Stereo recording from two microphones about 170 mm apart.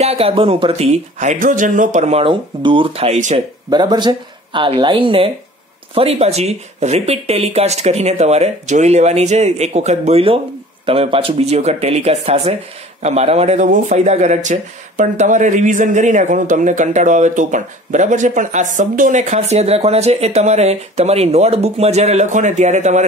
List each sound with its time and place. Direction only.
0.0 s speech: 35° right (ahead or behind)
3.7 s speech: 25° right (ahead or behind); by 23.0 s 45° right (ahead or behind)